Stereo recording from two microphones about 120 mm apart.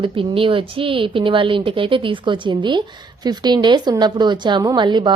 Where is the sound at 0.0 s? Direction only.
45° right (ahead or behind).